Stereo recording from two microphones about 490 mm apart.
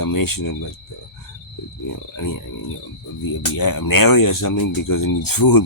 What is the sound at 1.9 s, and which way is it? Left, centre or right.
Speech, left.